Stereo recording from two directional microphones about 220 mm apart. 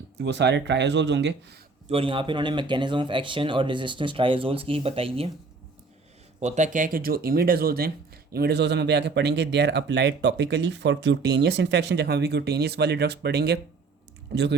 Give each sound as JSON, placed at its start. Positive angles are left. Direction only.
{"t": 0.2, "sound": "speech", "side_deg": -50}
{"t": 1.9, "sound": "speech", "side_deg": -25}
{"t": 6.4, "sound": "speech", "side_deg": -30}